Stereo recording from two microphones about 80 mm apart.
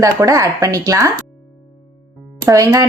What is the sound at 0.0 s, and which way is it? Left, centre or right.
Speech, right.